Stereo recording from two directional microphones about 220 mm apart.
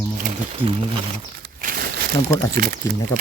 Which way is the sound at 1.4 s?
40° right (ahead or behind).